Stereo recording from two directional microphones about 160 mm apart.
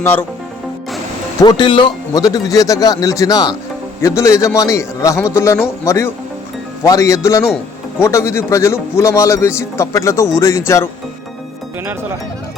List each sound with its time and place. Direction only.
0.0 s a man's voice: 15° left (ahead or behind)
1.4 s a man's voice: 25° left (ahead or behind)